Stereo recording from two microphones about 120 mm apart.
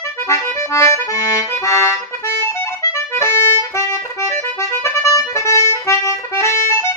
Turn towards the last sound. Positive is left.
turn(degrees=20)  # may be behind; listen again after turning